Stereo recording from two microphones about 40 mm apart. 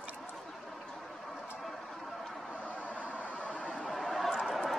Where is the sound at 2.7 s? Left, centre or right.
Left.